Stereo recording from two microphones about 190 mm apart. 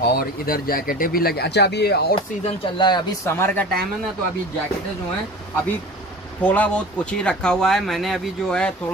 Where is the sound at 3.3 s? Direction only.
10° left (ahead or behind).